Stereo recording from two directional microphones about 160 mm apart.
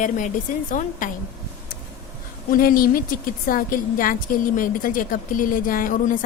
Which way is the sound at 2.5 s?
60° left (ahead or behind).